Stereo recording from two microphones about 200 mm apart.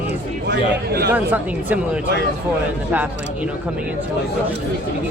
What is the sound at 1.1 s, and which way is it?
Speech, 10° right (ahead or behind).